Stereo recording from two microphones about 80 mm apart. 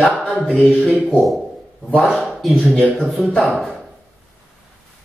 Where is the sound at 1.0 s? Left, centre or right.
Centre.